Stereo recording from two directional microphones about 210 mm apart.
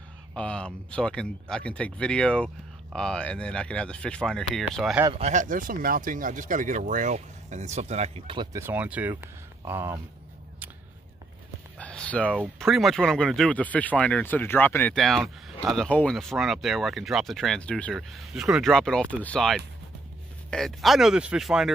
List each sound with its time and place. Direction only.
0.3 s speech: 5° left (ahead or behind)
5.1 s speech: 35° right (ahead or behind)
8.5 s speech: 10° right (ahead or behind)
11.8 s speech: 5° left (ahead or behind)